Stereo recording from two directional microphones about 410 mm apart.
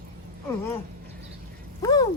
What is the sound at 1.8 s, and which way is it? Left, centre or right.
Speech, centre.